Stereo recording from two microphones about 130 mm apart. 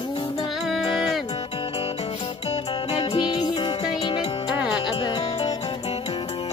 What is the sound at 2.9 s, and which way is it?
Music, 50° left (ahead or behind).